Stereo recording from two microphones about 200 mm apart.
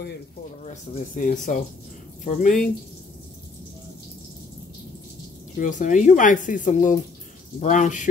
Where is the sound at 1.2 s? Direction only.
40° left (ahead or behind).